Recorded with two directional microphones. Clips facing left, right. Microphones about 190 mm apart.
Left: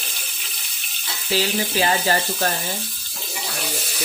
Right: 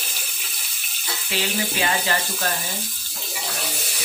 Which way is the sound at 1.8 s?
35° left (ahead or behind).